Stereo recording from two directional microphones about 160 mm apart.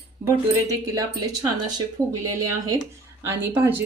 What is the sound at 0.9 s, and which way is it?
Speech, 20° right (ahead or behind).